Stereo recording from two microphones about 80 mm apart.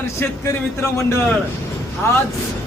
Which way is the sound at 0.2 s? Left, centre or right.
Left.